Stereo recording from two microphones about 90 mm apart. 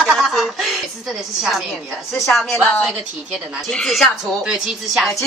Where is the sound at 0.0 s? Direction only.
Centre (ahead or behind).